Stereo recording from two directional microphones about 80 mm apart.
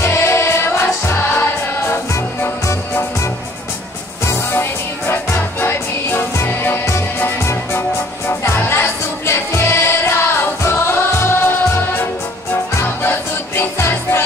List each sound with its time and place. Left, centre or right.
0.0 s music: left
4.3 s music: left